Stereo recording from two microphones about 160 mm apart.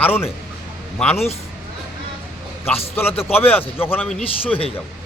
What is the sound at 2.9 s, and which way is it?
A man's voice, 15° left (ahead or behind).